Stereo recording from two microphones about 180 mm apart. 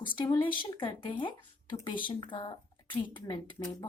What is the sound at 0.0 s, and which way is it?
Speech, 25° left (ahead or behind).